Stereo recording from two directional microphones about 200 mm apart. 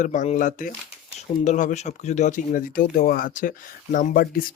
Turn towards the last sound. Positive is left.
turn(degrees=45)  # may be behind; listen again after turning